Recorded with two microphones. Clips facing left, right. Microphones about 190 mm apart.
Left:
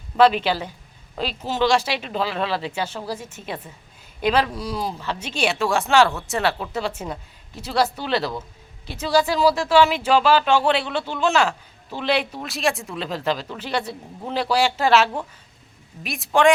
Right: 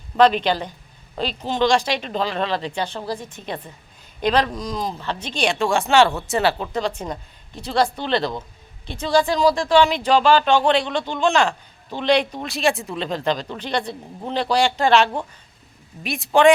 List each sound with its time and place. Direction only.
0.2 s speech: 5° left (ahead or behind)